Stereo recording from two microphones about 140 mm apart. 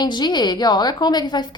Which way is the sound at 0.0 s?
30° left (ahead or behind).